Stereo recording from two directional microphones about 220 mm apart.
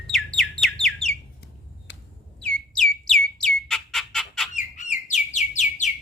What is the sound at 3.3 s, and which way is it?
Bird, centre (ahead or behind).